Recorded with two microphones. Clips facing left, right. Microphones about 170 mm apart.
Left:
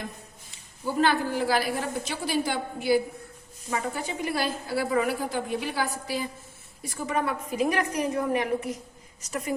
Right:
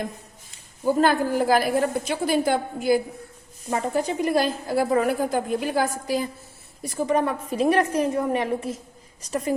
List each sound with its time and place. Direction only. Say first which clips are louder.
0.9 s a woman's voice: right 5 dB; 45° right (ahead or behind)